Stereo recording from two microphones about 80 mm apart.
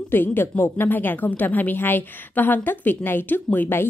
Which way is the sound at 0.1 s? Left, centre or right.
Left.